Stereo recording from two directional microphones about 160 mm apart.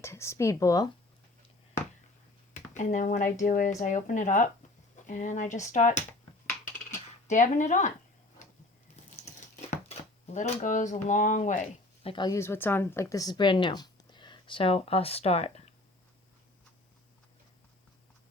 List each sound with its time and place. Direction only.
0.0 s speech: 15° left (ahead or behind)
2.7 s speech: 55° left (ahead or behind)
7.3 s speech: 50° left (ahead or behind)
9.0 s a sound: 45° left (ahead or behind)
10.3 s speech: 50° left (ahead or behind)
12.0 s a woman's voice: 30° left (ahead or behind)
12.4 s speech: 15° left (ahead or behind); by 15.7 s 40° left (ahead or behind)